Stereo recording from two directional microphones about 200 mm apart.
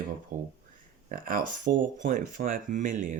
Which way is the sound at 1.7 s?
55° right (ahead or behind).